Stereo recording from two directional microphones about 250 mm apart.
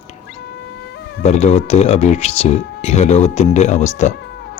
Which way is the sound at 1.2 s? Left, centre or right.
Left.